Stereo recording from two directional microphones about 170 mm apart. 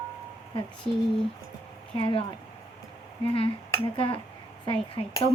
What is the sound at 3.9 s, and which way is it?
Speech, 30° left (ahead or behind).